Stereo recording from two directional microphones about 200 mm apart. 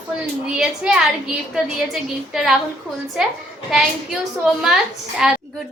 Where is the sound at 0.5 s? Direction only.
5° right (ahead or behind).